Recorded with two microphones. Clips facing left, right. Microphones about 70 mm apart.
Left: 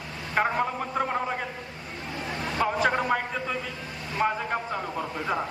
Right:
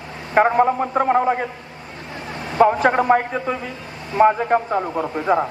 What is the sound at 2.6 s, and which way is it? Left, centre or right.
A man's voice, right.